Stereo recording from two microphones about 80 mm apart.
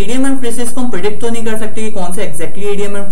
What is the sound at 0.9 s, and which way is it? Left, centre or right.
Speech, centre.